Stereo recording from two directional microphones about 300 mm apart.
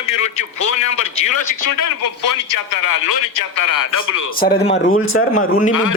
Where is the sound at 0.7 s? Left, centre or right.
Left.